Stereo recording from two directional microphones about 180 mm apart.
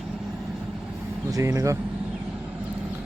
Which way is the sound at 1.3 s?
15° right (ahead or behind).